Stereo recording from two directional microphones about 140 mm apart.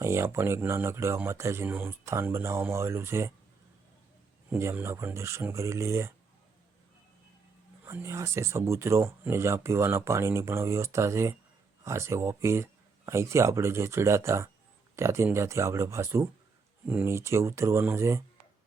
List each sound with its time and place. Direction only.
0.0 s speech: 20° right (ahead or behind)
4.4 s speech: 15° right (ahead or behind)
7.9 s speech: 20° right (ahead or behind)